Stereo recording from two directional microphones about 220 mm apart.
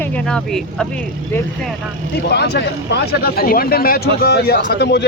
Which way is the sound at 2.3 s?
50° left (ahead or behind).